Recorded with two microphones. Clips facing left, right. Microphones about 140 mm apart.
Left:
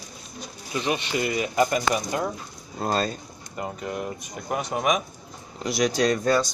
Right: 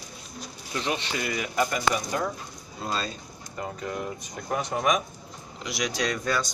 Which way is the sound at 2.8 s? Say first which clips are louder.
Left 6 dB; 50° left (ahead or behind).